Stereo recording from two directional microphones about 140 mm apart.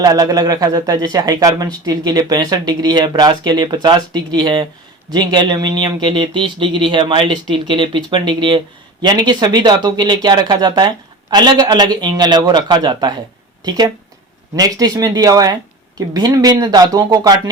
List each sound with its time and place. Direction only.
0.0 s a man's voice: 25° right (ahead or behind)